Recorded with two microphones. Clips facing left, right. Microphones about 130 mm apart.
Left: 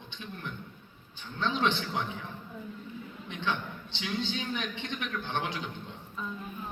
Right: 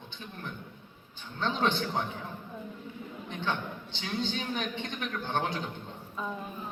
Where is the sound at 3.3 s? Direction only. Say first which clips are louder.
Even; 40° right (ahead or behind).